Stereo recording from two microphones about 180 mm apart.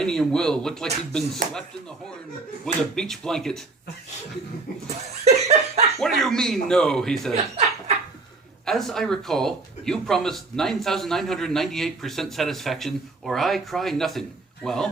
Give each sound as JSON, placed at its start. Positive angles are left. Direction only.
{"t": 0.0, "sound": "speech", "side_deg": 5}
{"t": 2.9, "sound": "speech", "side_deg": 5}
{"t": 4.9, "sound": "laughter", "side_deg": -40}
{"t": 6.0, "sound": "speech", "side_deg": 0}
{"t": 7.3, "sound": "laughter", "side_deg": -35}
{"t": 8.6, "sound": "speech", "side_deg": 0}